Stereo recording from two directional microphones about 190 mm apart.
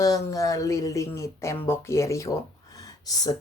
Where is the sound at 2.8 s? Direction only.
20° left (ahead or behind).